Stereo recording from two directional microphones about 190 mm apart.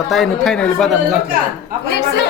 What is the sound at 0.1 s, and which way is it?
Speech, centre (ahead or behind).